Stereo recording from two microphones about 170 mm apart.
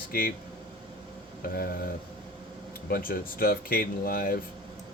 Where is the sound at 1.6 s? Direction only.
60° left (ahead or behind).